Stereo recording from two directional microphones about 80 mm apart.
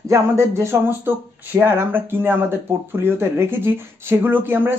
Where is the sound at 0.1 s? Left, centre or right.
Right.